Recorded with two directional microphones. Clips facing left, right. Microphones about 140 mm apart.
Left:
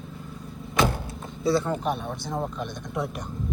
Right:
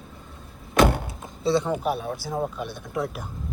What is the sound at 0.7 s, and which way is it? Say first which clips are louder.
Vehicle: right 5 dB; 60° right (ahead or behind).